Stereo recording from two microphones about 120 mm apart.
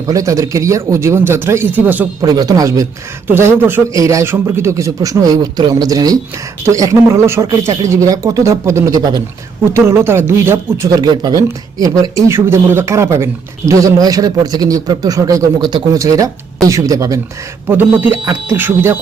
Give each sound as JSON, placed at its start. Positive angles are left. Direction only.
{"t": 0.1, "sound": "a woman's voice", "side_deg": -30}
{"t": 2.2, "sound": "a man's voice", "side_deg": -30}
{"t": 3.2, "sound": "a woman's voice", "side_deg": -20}
{"t": 9.7, "sound": "a woman's voice", "side_deg": -20}